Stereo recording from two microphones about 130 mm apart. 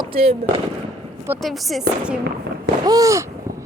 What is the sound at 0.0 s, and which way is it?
Speech, 45° right (ahead or behind).